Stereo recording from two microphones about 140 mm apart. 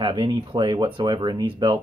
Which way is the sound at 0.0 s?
35° right (ahead or behind).